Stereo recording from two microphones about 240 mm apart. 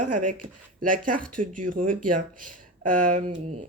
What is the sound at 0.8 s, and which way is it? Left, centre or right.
Speech, right.